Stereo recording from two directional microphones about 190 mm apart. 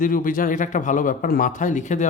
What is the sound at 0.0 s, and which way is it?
A man's voice, 45° left (ahead or behind).